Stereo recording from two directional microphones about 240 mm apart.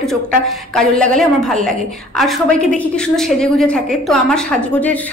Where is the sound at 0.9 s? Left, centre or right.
Centre.